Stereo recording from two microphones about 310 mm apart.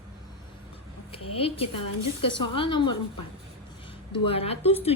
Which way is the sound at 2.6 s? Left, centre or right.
Centre.